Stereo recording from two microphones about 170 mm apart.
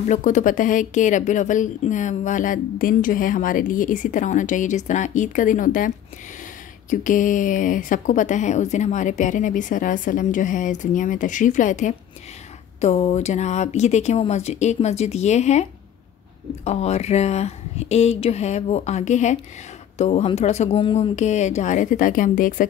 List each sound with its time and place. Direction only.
0.1 s a woman's voice: 45° left (ahead or behind)